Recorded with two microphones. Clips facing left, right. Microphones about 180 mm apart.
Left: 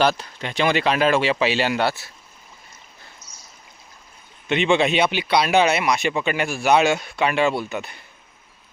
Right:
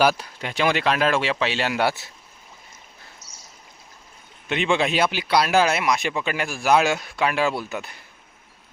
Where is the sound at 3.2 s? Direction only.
75° right (ahead or behind).